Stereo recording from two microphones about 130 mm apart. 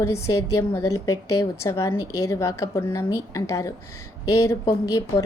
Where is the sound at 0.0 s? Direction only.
20° left (ahead or behind).